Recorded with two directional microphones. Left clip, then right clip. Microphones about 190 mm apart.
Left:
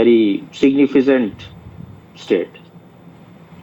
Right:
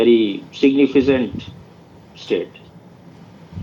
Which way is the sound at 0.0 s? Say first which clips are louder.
Left 2 dB; 45° left (ahead or behind).